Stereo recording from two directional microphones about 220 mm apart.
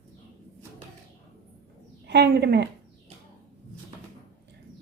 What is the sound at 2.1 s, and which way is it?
Speech, 50° right (ahead or behind).